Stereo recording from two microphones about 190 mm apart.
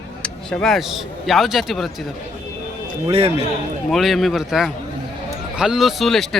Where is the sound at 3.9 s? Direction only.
Centre (ahead or behind).